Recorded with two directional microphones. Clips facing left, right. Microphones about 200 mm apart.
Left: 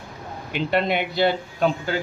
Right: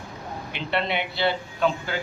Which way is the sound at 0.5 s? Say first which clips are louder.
Left 5 dB; 45° left (ahead or behind).